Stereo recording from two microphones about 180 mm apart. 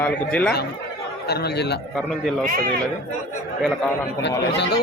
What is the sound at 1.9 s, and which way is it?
Speech, centre (ahead or behind).